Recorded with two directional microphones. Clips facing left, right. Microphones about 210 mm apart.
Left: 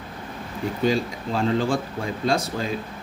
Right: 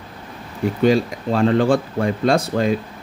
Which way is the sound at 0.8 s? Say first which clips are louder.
Right 6 dB; 65° right (ahead or behind).